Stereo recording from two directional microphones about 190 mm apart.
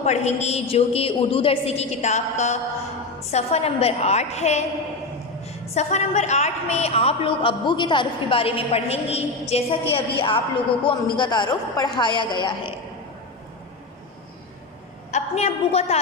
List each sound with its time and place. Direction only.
0.0 s a woman's voice: 35° left (ahead or behind)
15.0 s a woman's voice: 35° left (ahead or behind)